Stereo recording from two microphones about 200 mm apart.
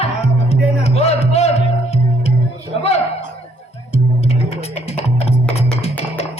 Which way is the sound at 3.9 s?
30° left (ahead or behind).